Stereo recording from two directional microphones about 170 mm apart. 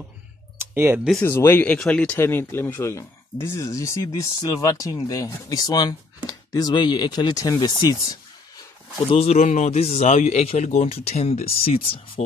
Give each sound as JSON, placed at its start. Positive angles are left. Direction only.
{"t": 0.6, "sound": "tick-tock", "side_deg": -15}
{"t": 1.2, "sound": "speech", "side_deg": 15}
{"t": 9.1, "sound": "speech", "side_deg": 40}